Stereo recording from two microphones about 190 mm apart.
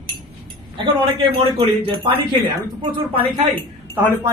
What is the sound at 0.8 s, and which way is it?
Speech, 25° right (ahead or behind).